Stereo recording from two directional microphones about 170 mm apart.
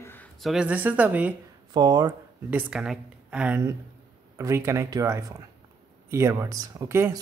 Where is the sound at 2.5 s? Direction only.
5° right (ahead or behind).